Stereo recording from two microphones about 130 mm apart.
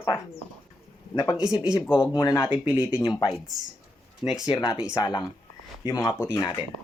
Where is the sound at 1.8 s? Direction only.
20° left (ahead or behind).